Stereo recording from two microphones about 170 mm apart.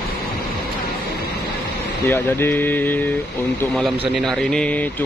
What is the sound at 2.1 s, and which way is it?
A man's voice, 10° left (ahead or behind).